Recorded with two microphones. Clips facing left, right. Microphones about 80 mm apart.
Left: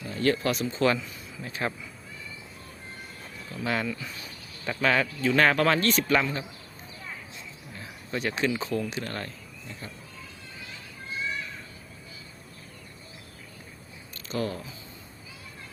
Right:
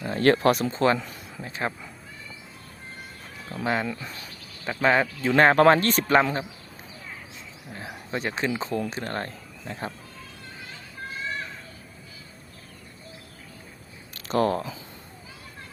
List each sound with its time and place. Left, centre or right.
0.0 s speech: right
1.4 s speech: right
3.5 s a man's voice: right
4.6 s a man's voice: centre; by 6.2 s right
7.7 s a man's voice: right
8.1 s a man's voice: right
9.6 s speech: right
14.2 s speech: right